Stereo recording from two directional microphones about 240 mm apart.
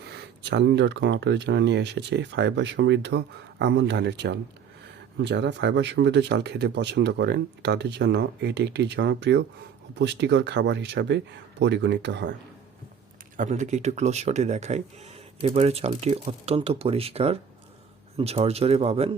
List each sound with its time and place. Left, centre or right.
0.2 s speech: right
13.3 s speech: right